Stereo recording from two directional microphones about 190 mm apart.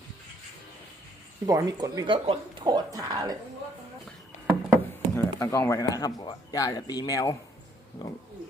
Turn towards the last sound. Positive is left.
turn(degrees=20)  # may be behind; listen again after turning